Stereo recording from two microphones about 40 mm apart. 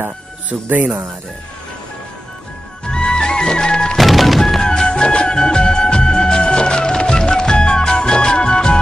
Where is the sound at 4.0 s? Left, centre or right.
Centre.